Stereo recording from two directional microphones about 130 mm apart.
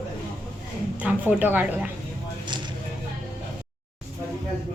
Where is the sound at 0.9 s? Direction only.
10° right (ahead or behind).